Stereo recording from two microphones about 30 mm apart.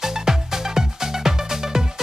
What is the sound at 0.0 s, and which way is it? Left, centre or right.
Music, centre.